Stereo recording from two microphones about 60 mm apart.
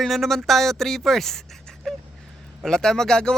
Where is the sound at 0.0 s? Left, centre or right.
Centre.